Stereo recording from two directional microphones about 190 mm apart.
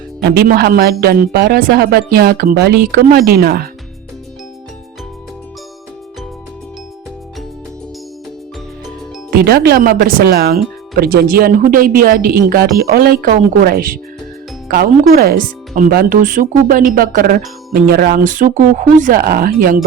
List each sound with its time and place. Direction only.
0.2 s speech: 60° right (ahead or behind)
9.3 s speech: 55° right (ahead or behind)
15.1 s speech: 50° right (ahead or behind)